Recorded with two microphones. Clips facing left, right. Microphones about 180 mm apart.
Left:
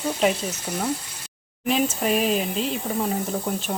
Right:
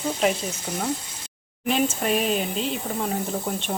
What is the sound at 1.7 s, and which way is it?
Speech, centre (ahead or behind).